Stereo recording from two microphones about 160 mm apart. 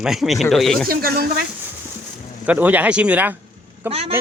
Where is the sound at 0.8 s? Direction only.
70° right (ahead or behind).